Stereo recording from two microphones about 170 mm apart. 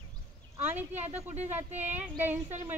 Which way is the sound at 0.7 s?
10° right (ahead or behind).